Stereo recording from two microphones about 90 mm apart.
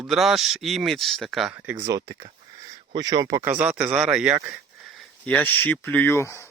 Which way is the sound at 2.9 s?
55° right (ahead or behind).